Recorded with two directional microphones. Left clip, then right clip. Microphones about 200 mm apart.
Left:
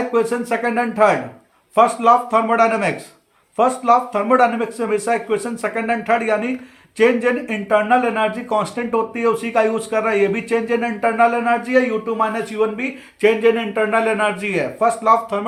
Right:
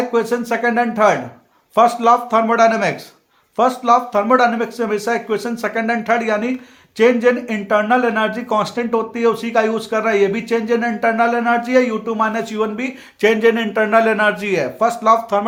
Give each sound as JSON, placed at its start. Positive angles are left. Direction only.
{"t": 0.1, "sound": "speech", "side_deg": -35}